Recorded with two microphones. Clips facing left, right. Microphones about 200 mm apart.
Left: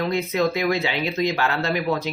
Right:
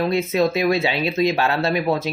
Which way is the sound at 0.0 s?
25° right (ahead or behind).